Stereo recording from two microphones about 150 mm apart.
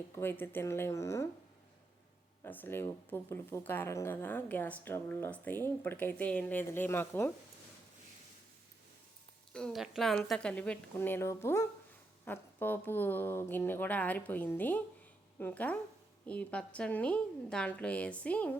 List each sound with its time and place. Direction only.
0.2 s speech: 15° left (ahead or behind)
2.4 s speech: 15° left (ahead or behind)
9.5 s speech: 5° left (ahead or behind)